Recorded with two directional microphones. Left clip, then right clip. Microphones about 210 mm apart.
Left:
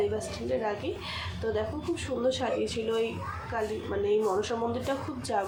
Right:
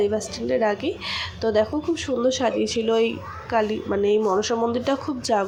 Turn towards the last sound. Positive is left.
turn(degrees=-30)  # may be behind; listen again after turning